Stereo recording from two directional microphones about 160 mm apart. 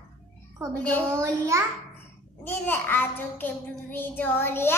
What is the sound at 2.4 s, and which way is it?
A child's voice, 15° left (ahead or behind).